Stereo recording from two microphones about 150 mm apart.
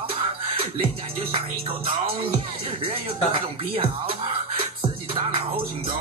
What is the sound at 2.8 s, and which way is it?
Music, 40° right (ahead or behind).